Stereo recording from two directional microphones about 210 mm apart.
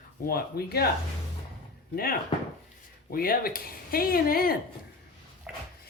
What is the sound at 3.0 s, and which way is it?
Speech, 45° left (ahead or behind).